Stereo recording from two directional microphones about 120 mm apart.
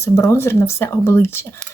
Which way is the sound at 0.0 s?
25° left (ahead or behind).